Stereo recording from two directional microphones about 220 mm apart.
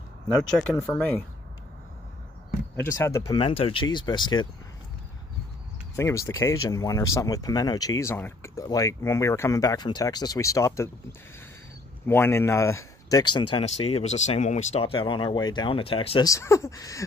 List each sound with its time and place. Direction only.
0.5 s speech: 5° left (ahead or behind)
2.8 s speech: 15° left (ahead or behind)
5.9 s speech: 10° left (ahead or behind)
16.3 s speech: 15° left (ahead or behind)